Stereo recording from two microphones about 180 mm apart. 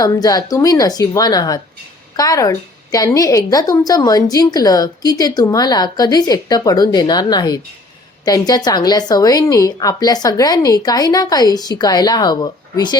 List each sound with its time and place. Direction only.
0.0 s a woman's voice: 20° left (ahead or behind)